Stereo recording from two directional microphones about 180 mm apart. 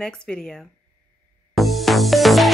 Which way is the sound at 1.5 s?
Centre (ahead or behind).